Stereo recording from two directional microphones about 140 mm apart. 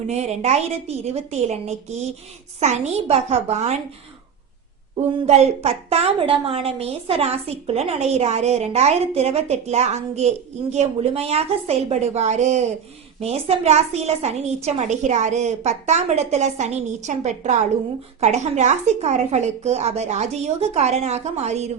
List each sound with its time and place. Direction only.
0.1 s a woman's voice: 50° right (ahead or behind)
4.9 s a woman's voice: 50° right (ahead or behind)